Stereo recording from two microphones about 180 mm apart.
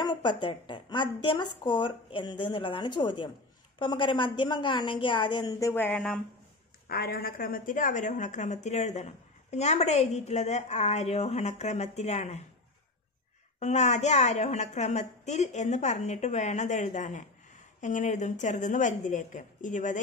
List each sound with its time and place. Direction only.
0.0 s a woman's voice: 25° left (ahead or behind); by 6.2 s 5° left (ahead or behind)
6.9 s a woman's voice: 55° left (ahead or behind); by 12.4 s 40° left (ahead or behind)
13.6 s a woman's voice: 40° left (ahead or behind)